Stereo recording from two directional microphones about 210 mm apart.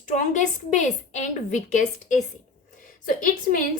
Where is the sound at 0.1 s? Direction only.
35° left (ahead or behind).